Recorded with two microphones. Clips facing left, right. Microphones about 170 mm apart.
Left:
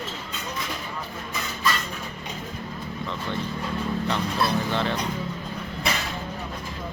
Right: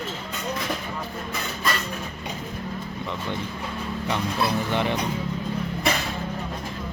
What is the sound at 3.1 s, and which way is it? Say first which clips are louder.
Speech: left 1 dB; 15° right (ahead or behind).